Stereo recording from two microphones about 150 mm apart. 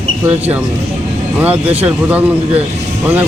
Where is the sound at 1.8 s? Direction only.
10° right (ahead or behind).